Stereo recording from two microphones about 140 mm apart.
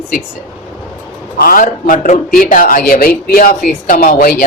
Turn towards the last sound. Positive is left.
turn(degrees=85)